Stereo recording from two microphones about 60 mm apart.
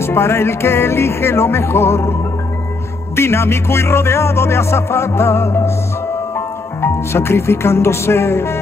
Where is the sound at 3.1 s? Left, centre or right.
Left.